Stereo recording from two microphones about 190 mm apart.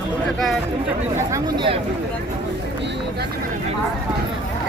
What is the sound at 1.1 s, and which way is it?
Speech, 15° right (ahead or behind).